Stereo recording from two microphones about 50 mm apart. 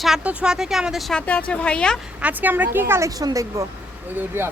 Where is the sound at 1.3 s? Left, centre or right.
Left.